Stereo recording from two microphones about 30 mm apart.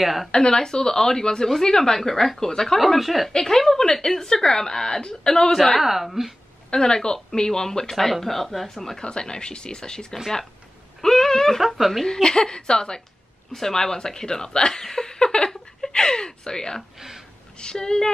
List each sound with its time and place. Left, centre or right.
0.0 s a woman's voice: centre
0.3 s a woman's voice: left; by 2.5 s centre
2.8 s a woman's voice: centre
3.3 s a woman's voice: centre
5.8 s a woman's voice: centre
6.7 s a woman's voice: left
7.9 s speech: centre
9.0 s a woman's voice: left
11.0 s a sound: centre
11.7 s a woman's voice: centre
12.1 s a woman's voice: left
14.7 s a sound: centre
15.9 s a woman's voice: left